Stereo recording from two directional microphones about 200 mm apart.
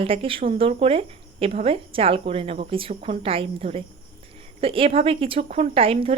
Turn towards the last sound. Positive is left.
turn(degrees=-30)  # may be behind; listen again after turning